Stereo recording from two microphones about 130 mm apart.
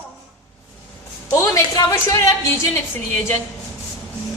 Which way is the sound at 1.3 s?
20° left (ahead or behind).